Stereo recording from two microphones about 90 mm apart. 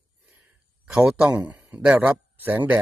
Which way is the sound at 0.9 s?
10° right (ahead or behind).